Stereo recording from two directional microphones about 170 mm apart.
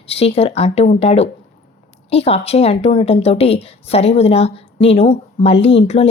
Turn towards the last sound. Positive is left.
turn(degrees=40)  # may be behind; listen again after turning